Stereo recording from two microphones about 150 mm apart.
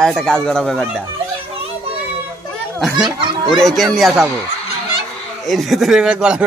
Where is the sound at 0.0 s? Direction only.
5° left (ahead or behind).